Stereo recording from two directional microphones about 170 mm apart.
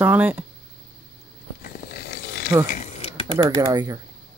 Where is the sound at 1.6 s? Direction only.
60° left (ahead or behind).